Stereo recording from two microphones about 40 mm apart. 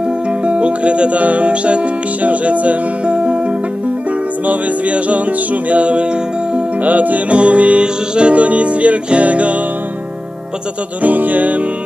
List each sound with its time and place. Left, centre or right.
0.3 s music: right
6.8 s music: right
11.0 s music: right